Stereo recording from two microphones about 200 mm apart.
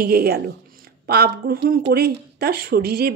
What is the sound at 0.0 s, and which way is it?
Speech, 50° right (ahead or behind).